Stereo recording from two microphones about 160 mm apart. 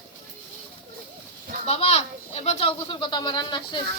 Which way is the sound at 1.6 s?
40° left (ahead or behind).